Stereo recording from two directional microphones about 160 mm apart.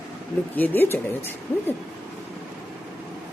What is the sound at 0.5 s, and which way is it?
Speech, 10° left (ahead or behind).